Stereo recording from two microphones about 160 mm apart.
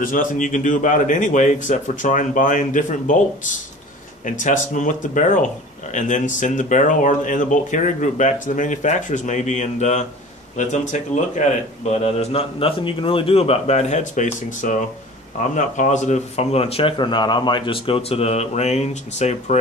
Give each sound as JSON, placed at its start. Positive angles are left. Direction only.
{"t": 0.0, "sound": "a man's voice", "side_deg": 55}
{"t": 4.3, "sound": "a man's voice", "side_deg": 50}